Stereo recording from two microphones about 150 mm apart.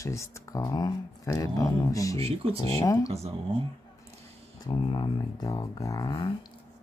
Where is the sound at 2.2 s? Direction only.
40° right (ahead or behind).